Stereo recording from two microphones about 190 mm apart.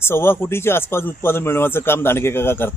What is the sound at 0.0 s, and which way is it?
Speech, 10° left (ahead or behind).